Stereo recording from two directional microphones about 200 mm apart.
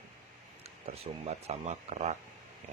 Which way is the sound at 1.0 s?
35° right (ahead or behind).